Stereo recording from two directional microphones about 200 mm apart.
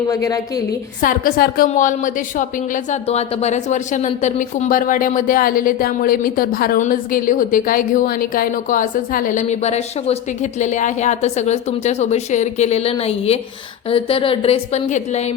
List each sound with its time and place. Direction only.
0.1 s a woman's voice: 15° left (ahead or behind)
1.0 s a woman's voice: 45° left (ahead or behind)